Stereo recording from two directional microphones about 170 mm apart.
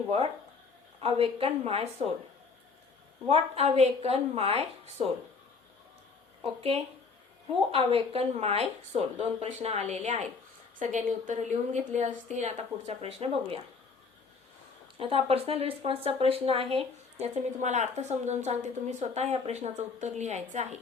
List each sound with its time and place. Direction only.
1.0 s speech: 35° right (ahead or behind)
3.2 s speech: 35° right (ahead or behind)
6.4 s speech: 35° right (ahead or behind)
14.9 s speech: 35° right (ahead or behind)